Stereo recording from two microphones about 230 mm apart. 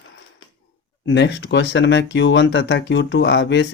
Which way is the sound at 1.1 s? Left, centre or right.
Left.